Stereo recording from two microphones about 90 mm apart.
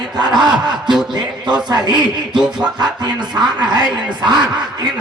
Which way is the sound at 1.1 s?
55° right (ahead or behind).